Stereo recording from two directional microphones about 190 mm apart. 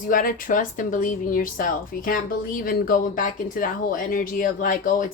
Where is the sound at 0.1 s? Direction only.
45° left (ahead or behind).